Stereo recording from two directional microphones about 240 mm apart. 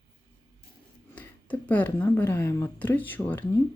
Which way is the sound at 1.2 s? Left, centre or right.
Centre.